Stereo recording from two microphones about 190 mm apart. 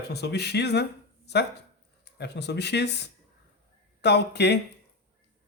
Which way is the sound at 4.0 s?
60° left (ahead or behind).